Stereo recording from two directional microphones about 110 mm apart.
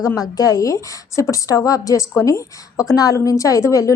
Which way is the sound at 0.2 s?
35° left (ahead or behind).